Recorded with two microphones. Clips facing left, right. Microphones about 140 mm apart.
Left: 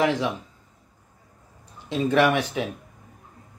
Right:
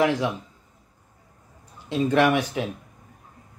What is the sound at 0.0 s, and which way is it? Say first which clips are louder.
Speech: right 1 dB; 15° right (ahead or behind).